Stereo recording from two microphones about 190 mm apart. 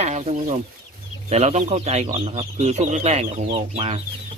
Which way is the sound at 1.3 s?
35° right (ahead or behind).